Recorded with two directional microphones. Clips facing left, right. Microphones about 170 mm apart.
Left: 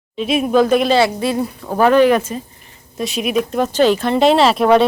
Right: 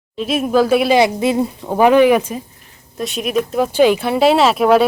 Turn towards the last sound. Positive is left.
turn(degrees=-5)  # may be behind; listen again after turning